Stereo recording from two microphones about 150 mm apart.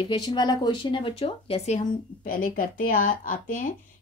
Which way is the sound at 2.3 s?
70° left (ahead or behind).